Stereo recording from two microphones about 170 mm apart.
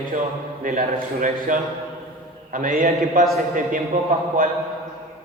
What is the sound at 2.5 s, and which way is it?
Speech, 50° right (ahead or behind).